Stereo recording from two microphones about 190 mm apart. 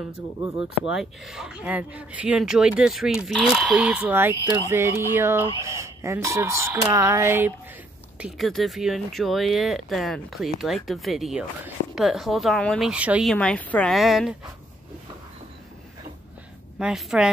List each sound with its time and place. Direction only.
0.6 s speech: 85° left
0.9 s speech: 5° right (ahead or behind)
8.2 s speech: centre (ahead or behind)
16.7 s speech: centre (ahead or behind)